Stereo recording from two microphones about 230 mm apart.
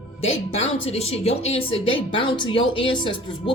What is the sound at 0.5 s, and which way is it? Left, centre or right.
A woman's voice, left.